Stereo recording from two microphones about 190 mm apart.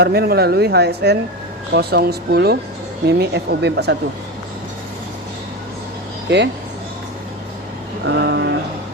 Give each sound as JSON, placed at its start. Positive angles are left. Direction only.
{"t": 0.0, "sound": "speech", "side_deg": -55}
{"t": 6.2, "sound": "speech", "side_deg": -65}
{"t": 8.0, "sound": "a sound", "side_deg": -70}